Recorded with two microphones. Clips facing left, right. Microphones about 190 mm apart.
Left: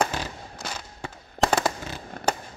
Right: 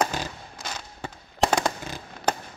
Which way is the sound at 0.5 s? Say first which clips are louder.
Left 1 dB; centre (ahead or behind).